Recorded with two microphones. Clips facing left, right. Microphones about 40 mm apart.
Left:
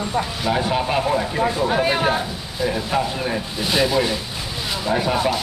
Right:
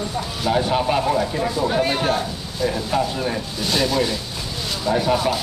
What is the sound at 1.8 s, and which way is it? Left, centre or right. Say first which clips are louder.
Speech: left 1 dB; centre.